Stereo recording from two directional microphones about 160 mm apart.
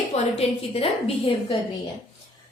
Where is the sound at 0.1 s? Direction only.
40° left (ahead or behind).